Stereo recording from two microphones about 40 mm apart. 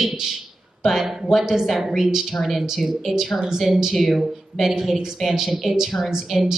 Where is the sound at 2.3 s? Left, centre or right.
Centre.